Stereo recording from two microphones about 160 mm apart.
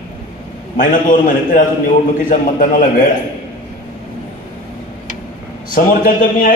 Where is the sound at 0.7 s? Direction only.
55° left (ahead or behind).